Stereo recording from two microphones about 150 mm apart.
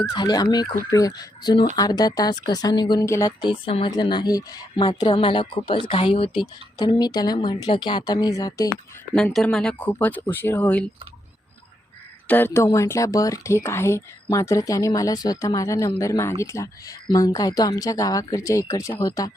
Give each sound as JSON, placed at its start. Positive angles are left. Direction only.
{"t": 0.1, "sound": "a woman's voice", "side_deg": 25}
{"t": 6.7, "sound": "speech", "side_deg": 25}
{"t": 9.1, "sound": "speech", "side_deg": 0}
{"t": 12.3, "sound": "speech", "side_deg": 15}